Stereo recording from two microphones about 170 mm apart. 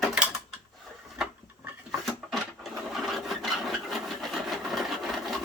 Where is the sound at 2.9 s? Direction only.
Centre (ahead or behind).